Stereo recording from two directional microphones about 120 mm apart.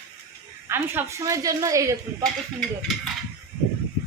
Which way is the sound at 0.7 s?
20° right (ahead or behind).